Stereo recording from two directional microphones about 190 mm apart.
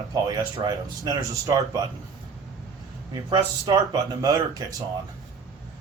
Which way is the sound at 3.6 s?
20° right (ahead or behind).